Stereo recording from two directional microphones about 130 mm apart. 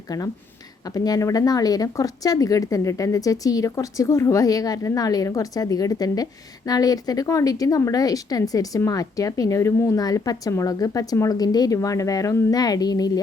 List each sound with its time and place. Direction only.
0.9 s a woman's voice: 30° left (ahead or behind)